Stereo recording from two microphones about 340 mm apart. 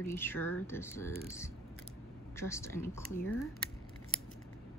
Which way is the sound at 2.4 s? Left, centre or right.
Centre.